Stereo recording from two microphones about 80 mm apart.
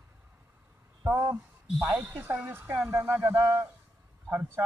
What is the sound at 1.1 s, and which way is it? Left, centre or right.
Speech, right.